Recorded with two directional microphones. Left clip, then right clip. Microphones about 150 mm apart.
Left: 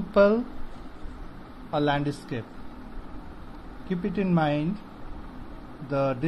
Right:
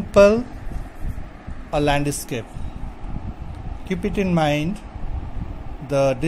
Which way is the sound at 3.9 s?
90° right.